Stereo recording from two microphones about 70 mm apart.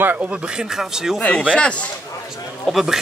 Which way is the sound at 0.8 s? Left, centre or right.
Centre.